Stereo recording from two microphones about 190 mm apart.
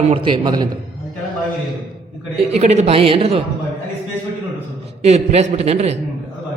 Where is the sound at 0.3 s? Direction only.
20° right (ahead or behind).